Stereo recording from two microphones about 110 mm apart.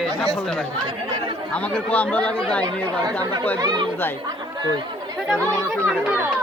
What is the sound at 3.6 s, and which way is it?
Speech, 40° right (ahead or behind).